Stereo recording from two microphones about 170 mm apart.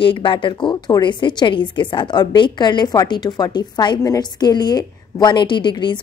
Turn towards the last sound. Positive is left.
turn(degrees=25)  # may be behind; listen again after turning